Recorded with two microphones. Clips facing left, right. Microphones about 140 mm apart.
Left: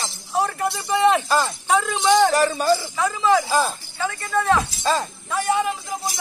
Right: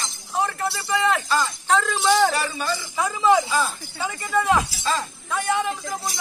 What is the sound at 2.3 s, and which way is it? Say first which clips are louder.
Speech: left 7 dB; 40° left (ahead or behind).